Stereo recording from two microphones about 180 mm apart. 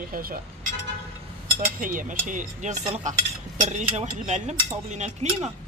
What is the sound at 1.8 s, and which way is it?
Speech, 50° right (ahead or behind).